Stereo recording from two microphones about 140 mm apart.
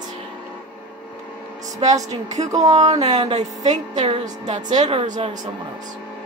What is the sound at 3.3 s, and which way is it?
A woman's voice, 55° right (ahead or behind).